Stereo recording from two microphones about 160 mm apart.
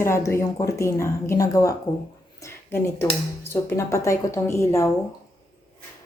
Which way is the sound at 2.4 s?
15° left (ahead or behind).